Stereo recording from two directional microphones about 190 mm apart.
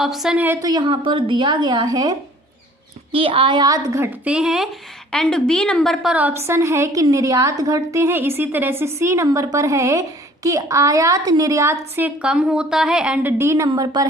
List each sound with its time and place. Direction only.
0.0 s a woman's voice: centre (ahead or behind); by 14.1 s 20° right (ahead or behind)